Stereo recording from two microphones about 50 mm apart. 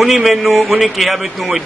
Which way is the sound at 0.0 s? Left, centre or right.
Centre.